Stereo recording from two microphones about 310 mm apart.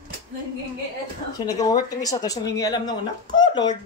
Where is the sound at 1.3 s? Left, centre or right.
Centre.